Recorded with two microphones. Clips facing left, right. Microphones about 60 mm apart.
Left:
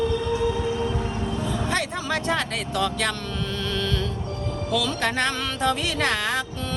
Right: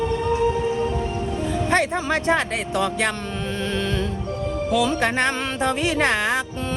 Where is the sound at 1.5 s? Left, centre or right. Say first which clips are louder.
Right 8 dB; right.